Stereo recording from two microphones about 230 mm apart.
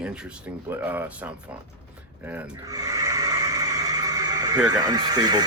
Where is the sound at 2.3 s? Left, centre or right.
Centre.